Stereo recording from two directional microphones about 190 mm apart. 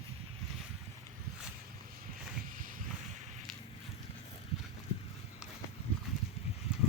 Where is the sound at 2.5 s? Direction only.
45° right (ahead or behind).